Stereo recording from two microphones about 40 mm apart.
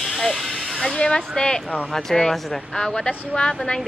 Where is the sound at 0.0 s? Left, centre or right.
Centre.